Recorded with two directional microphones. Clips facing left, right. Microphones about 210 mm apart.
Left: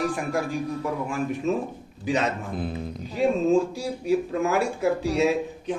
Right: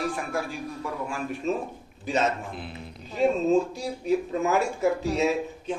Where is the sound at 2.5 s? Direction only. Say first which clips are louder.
Left 8 dB; 45° left (ahead or behind).